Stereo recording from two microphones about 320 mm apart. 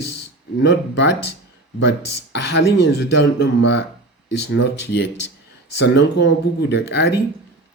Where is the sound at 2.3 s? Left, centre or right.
Left.